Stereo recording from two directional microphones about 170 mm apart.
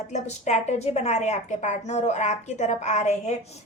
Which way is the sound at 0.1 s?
40° left (ahead or behind).